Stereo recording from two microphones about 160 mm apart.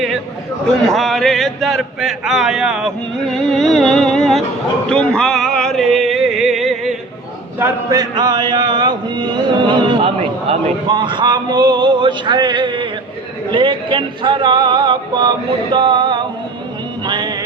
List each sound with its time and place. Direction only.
0.9 s speech: centre (ahead or behind)
4.9 s a sound: 5° left (ahead or behind)
7.6 s chant: 20° right (ahead or behind)
17.1 s music: 30° right (ahead or behind)